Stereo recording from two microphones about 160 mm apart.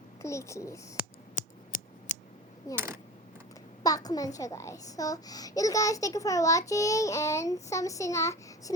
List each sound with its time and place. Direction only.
0.2 s a child's voice: 20° left (ahead or behind)
1.4 s scissors: 50° left (ahead or behind)
2.7 s speech: 15° right (ahead or behind)
3.8 s a child's voice: 25° left (ahead or behind)